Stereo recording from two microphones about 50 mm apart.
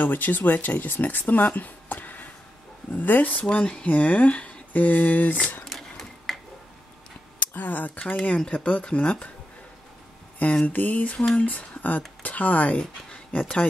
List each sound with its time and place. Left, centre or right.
0.0 s speech: left
3.4 s speech: left
5.7 s sewing machine: centre
7.3 s speech: left
10.6 s speech: left